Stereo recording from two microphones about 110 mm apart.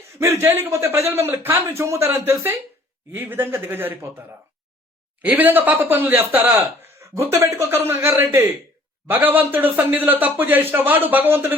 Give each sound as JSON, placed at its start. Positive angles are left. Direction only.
{"t": 0.2, "sound": "speech", "side_deg": -20}